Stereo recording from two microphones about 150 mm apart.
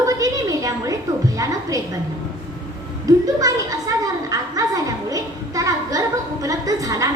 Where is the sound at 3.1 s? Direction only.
25° right (ahead or behind).